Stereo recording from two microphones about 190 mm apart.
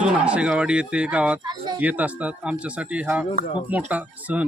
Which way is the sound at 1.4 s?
25° right (ahead or behind).